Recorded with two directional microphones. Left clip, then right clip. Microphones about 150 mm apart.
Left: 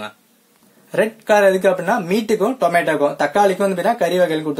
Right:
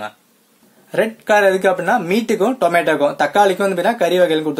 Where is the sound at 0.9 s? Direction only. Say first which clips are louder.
Even; 15° right (ahead or behind).